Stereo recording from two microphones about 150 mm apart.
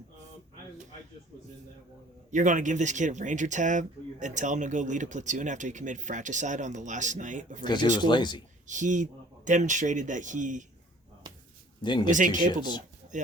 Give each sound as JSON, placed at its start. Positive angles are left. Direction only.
{"t": 2.3, "sound": "speech", "side_deg": -55}
{"t": 7.6, "sound": "speech", "side_deg": 30}
{"t": 8.6, "sound": "speech", "side_deg": -55}
{"t": 11.8, "sound": "speech", "side_deg": 30}
{"t": 12.1, "sound": "speech", "side_deg": -60}